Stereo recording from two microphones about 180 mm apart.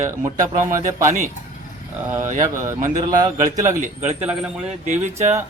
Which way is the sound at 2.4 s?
15° right (ahead or behind).